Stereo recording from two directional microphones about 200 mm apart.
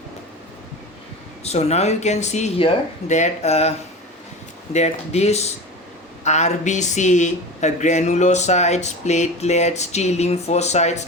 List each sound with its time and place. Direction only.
1.5 s speech: 35° left (ahead or behind)